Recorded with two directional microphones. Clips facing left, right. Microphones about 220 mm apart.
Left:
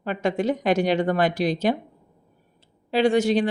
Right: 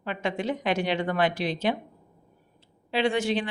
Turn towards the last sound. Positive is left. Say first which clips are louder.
# left 6 dB
turn(degrees=40)  # may be behind; listen again after turning